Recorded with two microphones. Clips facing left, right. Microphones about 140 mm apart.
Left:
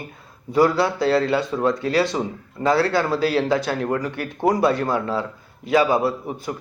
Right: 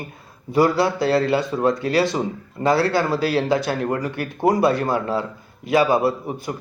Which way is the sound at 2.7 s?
5° right (ahead or behind).